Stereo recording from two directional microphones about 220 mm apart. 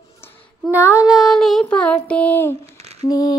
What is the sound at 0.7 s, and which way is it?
Child singing, 5° right (ahead or behind).